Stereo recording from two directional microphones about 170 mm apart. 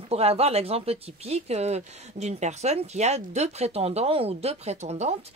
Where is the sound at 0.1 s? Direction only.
35° right (ahead or behind).